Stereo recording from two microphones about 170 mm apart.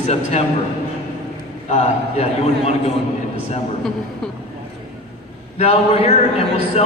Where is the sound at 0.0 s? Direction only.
40° left (ahead or behind).